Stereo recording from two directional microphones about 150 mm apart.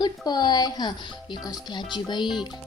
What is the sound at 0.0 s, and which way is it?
Speech, 25° left (ahead or behind).